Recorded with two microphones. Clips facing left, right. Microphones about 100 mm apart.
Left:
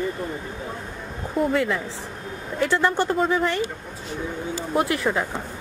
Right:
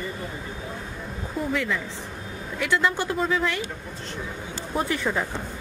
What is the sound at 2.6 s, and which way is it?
Speech, 35° left (ahead or behind).